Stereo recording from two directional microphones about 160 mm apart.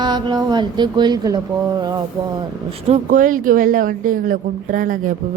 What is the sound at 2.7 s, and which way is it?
Speech, 45° right (ahead or behind).